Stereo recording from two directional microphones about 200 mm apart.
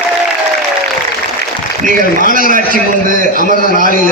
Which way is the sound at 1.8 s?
40° right (ahead or behind).